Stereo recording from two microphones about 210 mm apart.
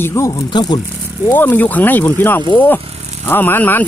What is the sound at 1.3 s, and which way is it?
Speech, 10° left (ahead or behind).